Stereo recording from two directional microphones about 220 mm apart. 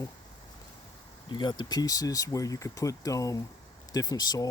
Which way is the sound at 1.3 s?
20° left (ahead or behind).